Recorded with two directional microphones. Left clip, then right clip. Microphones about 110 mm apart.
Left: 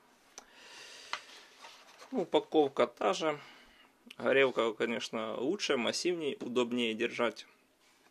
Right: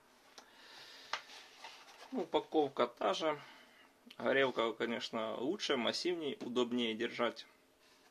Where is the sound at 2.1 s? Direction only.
75° left (ahead or behind); by 7.4 s 50° left (ahead or behind).